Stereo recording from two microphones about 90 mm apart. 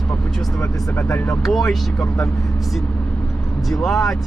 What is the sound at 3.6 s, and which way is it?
Speech, centre (ahead or behind).